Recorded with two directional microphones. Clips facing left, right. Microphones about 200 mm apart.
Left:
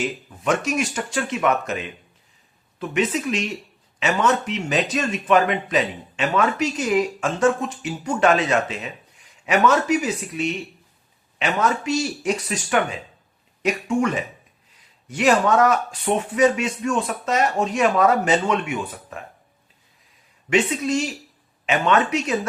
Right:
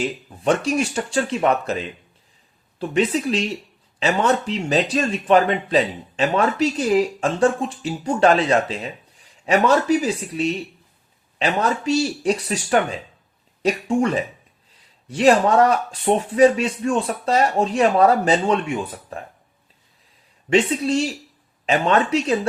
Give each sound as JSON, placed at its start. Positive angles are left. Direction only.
{"t": 0.0, "sound": "speech", "side_deg": -30}
{"t": 20.5, "sound": "speech", "side_deg": -30}